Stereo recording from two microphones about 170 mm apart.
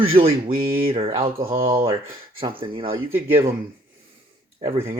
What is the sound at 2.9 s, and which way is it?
Speech, 15° right (ahead or behind).